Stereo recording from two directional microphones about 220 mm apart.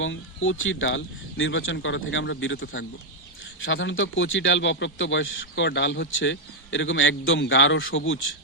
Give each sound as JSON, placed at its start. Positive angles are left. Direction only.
{"t": 0.0, "sound": "a man's voice", "side_deg": 60}